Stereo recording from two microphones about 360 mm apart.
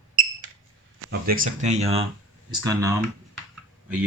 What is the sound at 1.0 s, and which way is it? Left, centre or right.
Speech, right.